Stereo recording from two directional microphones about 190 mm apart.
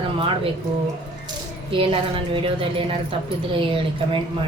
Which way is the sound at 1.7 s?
30° right (ahead or behind).